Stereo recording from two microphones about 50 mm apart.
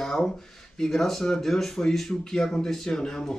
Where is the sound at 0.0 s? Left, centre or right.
Centre.